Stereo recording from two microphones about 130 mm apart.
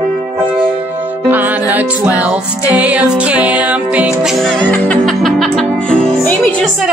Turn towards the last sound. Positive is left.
turn(degrees=10)  # may be behind; listen again after turning